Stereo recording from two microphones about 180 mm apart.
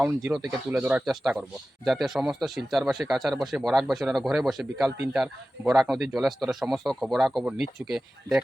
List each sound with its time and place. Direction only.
0.3 s speech: 5° right (ahead or behind)